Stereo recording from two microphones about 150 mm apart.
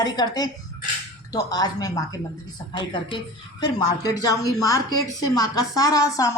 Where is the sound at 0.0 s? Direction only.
25° left (ahead or behind).